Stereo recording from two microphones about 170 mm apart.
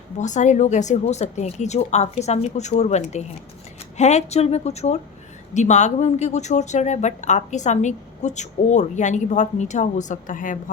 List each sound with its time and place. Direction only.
0.2 s speech: 45° left (ahead or behind)